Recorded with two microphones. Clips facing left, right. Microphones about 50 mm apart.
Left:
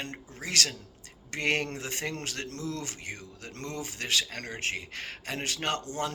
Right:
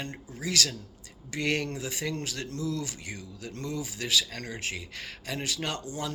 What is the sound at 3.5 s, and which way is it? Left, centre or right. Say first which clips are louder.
Speech: right 2 dB; left.